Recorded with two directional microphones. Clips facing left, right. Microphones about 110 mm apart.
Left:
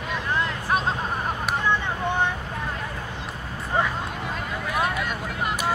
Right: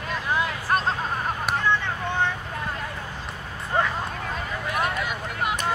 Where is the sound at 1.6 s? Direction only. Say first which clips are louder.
Left 2 dB; 15° left (ahead or behind).